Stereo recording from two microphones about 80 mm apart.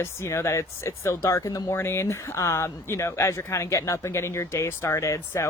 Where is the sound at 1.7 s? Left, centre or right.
Left.